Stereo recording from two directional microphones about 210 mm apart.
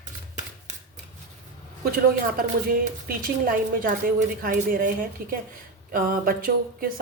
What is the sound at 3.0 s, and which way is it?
A woman's voice, 40° right (ahead or behind).